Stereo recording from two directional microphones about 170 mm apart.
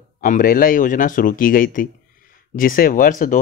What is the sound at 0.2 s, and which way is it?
Speech, 55° left (ahead or behind).